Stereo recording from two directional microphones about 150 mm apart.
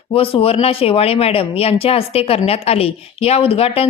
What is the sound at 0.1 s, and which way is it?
Speech, 35° left (ahead or behind).